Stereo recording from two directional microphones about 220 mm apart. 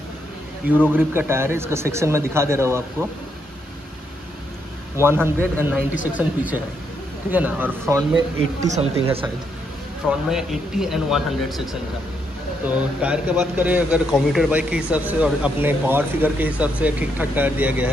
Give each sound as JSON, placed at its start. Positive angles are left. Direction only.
{"t": 0.7, "sound": "a man's voice", "side_deg": -10}
{"t": 4.9, "sound": "a man's voice", "side_deg": -10}
{"t": 8.6, "sound": "speech", "side_deg": -30}
{"t": 10.0, "sound": "a man's voice", "side_deg": 0}